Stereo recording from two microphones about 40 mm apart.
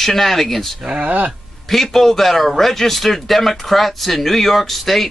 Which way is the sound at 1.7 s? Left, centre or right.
Centre.